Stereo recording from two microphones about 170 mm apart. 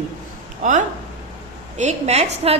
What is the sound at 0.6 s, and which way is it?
A woman's voice, 45° right (ahead or behind).